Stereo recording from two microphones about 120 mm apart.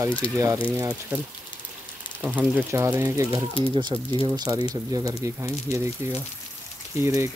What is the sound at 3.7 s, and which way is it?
Speech, 40° right (ahead or behind).